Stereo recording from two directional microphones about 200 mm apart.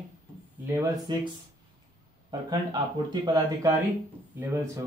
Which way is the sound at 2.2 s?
20° right (ahead or behind).